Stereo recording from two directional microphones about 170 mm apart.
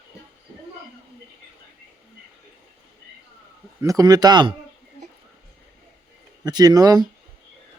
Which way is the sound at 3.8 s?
20° right (ahead or behind).